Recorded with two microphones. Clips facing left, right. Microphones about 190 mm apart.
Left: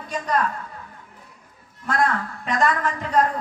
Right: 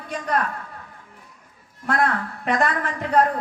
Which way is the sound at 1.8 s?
60° right (ahead or behind).